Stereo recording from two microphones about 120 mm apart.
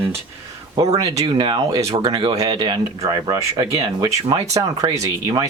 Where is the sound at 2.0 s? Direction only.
45° right (ahead or behind).